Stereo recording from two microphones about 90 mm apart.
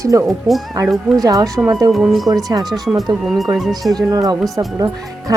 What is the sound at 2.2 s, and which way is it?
Speech, 45° right (ahead or behind).